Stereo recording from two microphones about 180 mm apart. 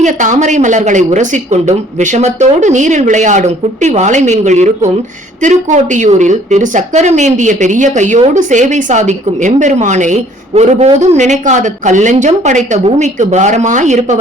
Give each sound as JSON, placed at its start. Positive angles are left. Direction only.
{"t": 0.0, "sound": "a woman's voice", "side_deg": -45}